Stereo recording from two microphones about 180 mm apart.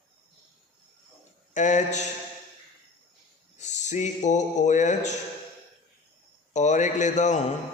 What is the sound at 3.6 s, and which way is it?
A man's voice, 40° left (ahead or behind).